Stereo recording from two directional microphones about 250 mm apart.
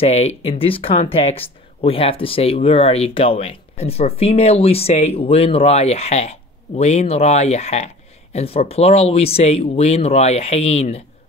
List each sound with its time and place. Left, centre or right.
0.0 s speech: left